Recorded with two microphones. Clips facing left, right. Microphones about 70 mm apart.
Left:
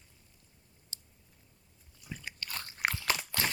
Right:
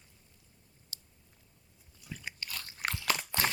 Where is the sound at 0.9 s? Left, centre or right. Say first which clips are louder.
Right 1 dB; left.